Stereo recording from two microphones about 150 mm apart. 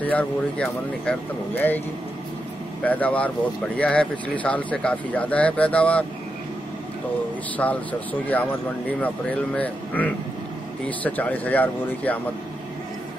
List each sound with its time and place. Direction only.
0.0 s speech: 10° left (ahead or behind)
2.8 s speech: 10° left (ahead or behind)
7.5 s speech: 10° left (ahead or behind)